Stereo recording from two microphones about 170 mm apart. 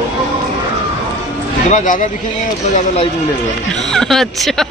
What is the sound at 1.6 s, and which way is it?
Speech, 45° left (ahead or behind).